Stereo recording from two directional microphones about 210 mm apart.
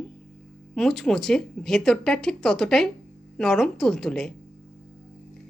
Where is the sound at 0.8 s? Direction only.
Centre (ahead or behind).